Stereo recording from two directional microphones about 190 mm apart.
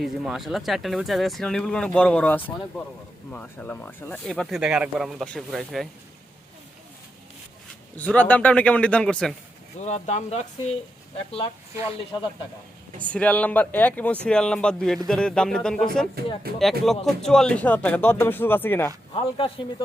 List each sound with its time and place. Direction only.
0.0 s speech: centre (ahead or behind)
7.9 s speech: 10° left (ahead or behind)
9.8 s speech: 35° left (ahead or behind)
13.0 s speech: 5° left (ahead or behind)
16.5 s speech: 55° right (ahead or behind)
16.8 s speech: centre (ahead or behind)